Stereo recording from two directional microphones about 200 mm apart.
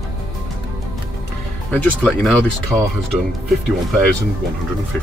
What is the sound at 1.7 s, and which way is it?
Speech, 5° left (ahead or behind).